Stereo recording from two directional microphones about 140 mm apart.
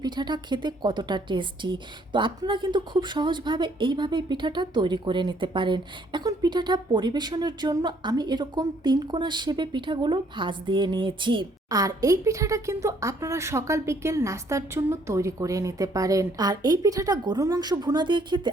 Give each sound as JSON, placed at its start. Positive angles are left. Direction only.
{"t": 0.0, "sound": "a woman's voice", "side_deg": -30}